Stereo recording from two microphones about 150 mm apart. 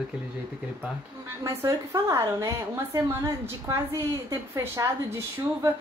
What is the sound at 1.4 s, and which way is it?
A woman's voice, 20° right (ahead or behind).